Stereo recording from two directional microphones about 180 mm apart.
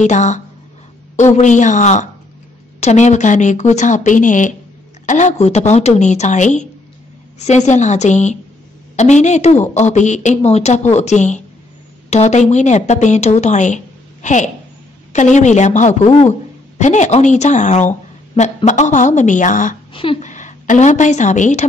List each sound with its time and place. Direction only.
0.0 s a man's voice: 40° left (ahead or behind)
19.9 s speech: 30° left (ahead or behind)
20.2 s speech: 45° left (ahead or behind)